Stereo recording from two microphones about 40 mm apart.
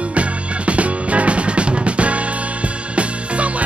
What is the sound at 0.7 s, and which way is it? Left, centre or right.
Music, right.